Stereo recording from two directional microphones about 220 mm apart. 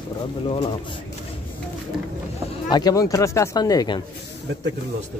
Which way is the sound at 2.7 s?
20° left (ahead or behind).